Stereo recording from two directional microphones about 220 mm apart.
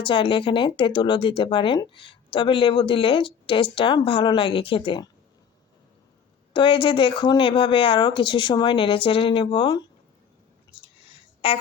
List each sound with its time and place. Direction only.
0.0 s speech: 25° left (ahead or behind)
6.5 s speech: 20° left (ahead or behind)
11.1 s a sound: 25° left (ahead or behind)